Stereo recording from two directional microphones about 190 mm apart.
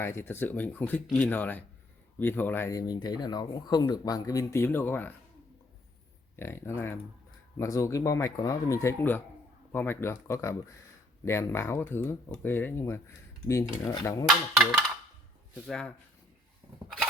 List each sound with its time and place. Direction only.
0.0 s speech: 10° left (ahead or behind)
6.3 s speech: 15° left (ahead or behind)
14.3 s speech: centre (ahead or behind)